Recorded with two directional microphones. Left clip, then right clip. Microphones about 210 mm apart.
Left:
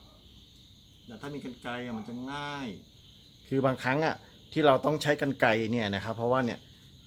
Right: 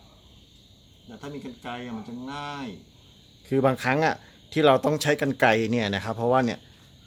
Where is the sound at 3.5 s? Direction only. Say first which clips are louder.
Right 5 dB; 40° right (ahead or behind).